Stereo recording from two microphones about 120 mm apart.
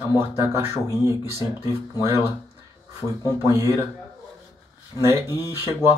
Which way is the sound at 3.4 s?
25° right (ahead or behind).